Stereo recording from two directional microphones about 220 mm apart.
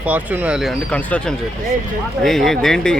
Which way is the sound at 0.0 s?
5° right (ahead or behind).